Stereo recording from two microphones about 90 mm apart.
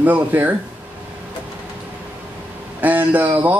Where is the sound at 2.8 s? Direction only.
20° right (ahead or behind).